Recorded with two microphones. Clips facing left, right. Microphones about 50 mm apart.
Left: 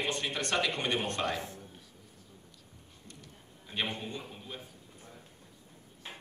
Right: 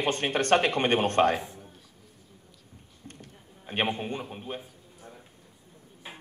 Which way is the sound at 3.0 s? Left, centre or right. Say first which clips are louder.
Right 6 dB; right.